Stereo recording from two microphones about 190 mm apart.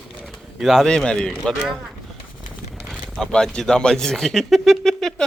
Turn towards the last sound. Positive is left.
turn(degrees=0)  # may be behind; listen again after turning